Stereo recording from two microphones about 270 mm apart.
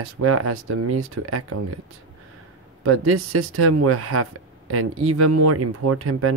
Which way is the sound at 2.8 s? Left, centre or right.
Right.